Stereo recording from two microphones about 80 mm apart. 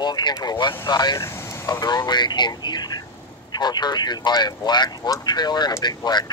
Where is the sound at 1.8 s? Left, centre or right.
Left.